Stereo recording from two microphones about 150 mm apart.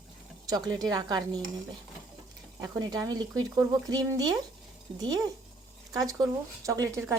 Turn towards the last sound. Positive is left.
turn(degrees=-20)  # may be behind; listen again after turning